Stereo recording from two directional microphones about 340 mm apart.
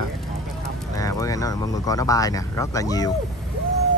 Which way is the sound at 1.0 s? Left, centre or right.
Centre.